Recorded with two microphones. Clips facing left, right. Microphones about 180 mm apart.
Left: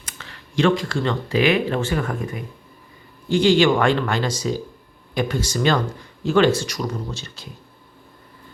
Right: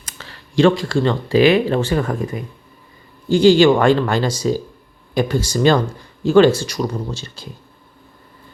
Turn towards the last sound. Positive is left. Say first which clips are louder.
# right 3 dB
turn(degrees=-35)  # may be behind; listen again after turning